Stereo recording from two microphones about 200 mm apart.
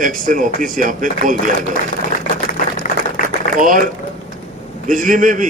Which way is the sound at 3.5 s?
40° right (ahead or behind).